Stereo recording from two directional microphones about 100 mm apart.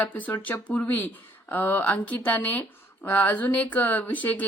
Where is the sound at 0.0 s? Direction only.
15° left (ahead or behind).